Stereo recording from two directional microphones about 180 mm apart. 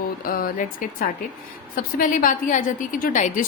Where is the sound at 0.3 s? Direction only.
50° left (ahead or behind).